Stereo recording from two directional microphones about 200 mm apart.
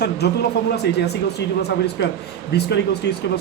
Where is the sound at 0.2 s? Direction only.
55° left (ahead or behind).